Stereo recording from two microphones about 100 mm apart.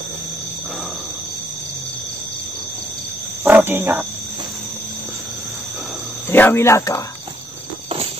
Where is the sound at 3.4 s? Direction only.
20° right (ahead or behind).